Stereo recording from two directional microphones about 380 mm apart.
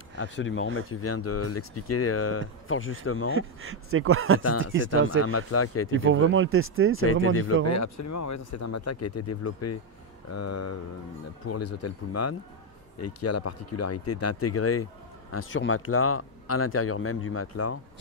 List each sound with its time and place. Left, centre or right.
0.2 s speech: left
3.3 s speech: right
5.2 s speech: left
5.9 s speech: right
7.6 s speech: left